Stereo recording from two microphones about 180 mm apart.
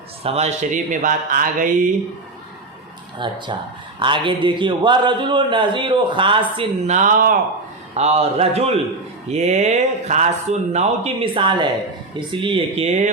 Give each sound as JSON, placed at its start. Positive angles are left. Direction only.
{"t": 0.2, "sound": "speech", "side_deg": -35}
{"t": 3.2, "sound": "a man's voice", "side_deg": -25}
{"t": 7.9, "sound": "speech", "side_deg": -35}